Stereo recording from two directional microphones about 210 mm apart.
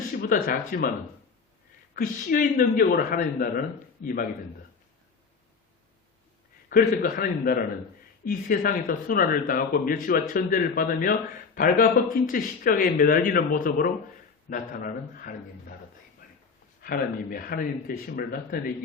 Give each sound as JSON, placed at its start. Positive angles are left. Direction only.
{"t": 0.2, "sound": "speech", "side_deg": 40}
{"t": 2.0, "sound": "a man's voice", "side_deg": 40}
{"t": 6.7, "sound": "a man's voice", "side_deg": 40}
{"t": 16.8, "sound": "speech", "side_deg": 45}